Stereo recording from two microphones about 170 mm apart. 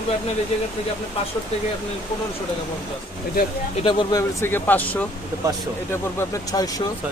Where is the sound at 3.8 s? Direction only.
30° left (ahead or behind).